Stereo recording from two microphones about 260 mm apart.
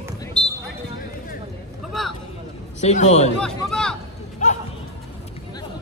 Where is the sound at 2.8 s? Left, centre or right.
Left.